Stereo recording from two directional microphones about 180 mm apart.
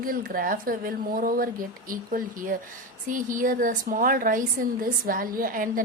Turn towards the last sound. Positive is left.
turn(degrees=-50)  # may be behind; listen again after turning